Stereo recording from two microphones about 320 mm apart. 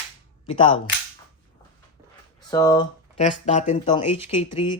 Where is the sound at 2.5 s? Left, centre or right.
Centre.